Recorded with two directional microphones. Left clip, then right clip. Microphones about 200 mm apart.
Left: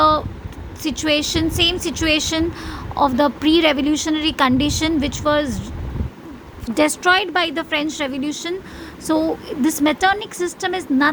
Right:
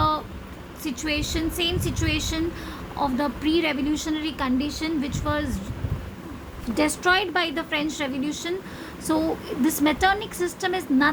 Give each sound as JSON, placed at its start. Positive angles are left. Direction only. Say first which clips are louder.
{"t": 0.8, "sound": "a woman's voice", "louder": "left 8 dB", "side_deg": 25}
{"t": 6.7, "sound": "a woman's voice", "louder": "left 6 dB", "side_deg": 25}